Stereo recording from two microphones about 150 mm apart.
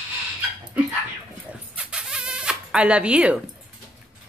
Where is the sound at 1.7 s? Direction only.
5° right (ahead or behind).